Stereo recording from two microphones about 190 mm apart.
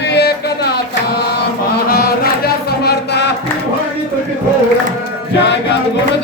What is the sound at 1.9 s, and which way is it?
Chant, 55° left (ahead or behind).